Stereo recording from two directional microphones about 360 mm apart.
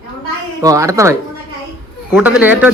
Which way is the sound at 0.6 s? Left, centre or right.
Centre.